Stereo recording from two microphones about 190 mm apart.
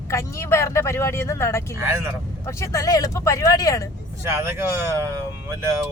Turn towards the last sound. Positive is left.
turn(degrees=-15)  # may be behind; listen again after turning